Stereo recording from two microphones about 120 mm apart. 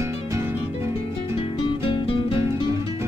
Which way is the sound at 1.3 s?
45° left (ahead or behind).